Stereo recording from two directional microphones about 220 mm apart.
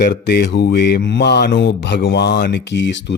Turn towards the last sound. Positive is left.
turn(degrees=55)  # may be behind; listen again after turning